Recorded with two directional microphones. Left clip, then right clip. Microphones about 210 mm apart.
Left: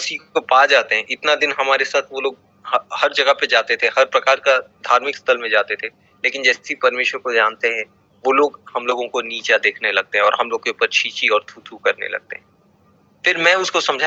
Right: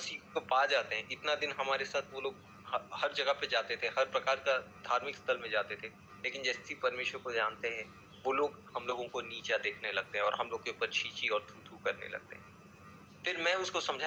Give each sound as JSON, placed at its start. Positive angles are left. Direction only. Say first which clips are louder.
{"t": 0.0, "sound": "a man's voice", "louder": "left 17 dB", "side_deg": 45}